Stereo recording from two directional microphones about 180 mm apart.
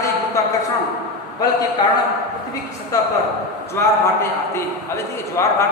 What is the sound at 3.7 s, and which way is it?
A man's voice, 15° left (ahead or behind).